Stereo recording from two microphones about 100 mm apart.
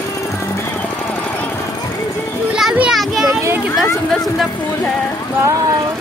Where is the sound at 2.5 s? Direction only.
10° right (ahead or behind).